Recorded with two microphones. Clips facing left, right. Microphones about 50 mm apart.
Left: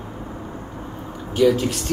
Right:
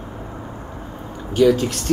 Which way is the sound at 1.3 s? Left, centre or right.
Centre.